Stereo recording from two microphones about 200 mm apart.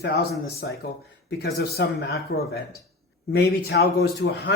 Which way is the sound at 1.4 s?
50° left (ahead or behind).